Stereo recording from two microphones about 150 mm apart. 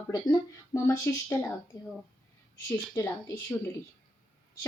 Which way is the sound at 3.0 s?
20° left (ahead or behind).